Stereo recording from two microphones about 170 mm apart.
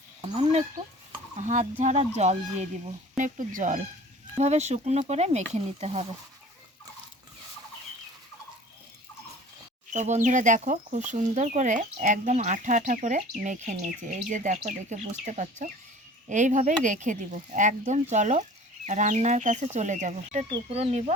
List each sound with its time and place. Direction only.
0.2 s speech: 40° right (ahead or behind)
3.2 s speech: 50° right (ahead or behind)
9.9 s speech: 45° right (ahead or behind)